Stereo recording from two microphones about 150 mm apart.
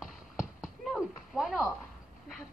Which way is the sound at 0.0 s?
Centre (ahead or behind).